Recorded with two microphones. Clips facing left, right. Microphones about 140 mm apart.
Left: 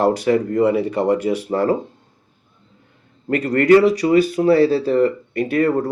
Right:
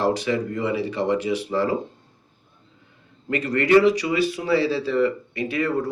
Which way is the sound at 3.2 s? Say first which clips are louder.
Left 7 dB; 50° left (ahead or behind).